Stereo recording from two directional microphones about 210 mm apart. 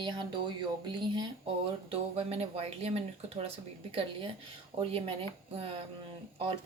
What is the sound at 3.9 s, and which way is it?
Speech, 25° right (ahead or behind).